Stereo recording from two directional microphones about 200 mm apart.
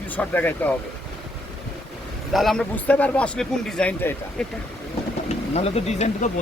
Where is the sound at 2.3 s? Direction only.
Centre (ahead or behind).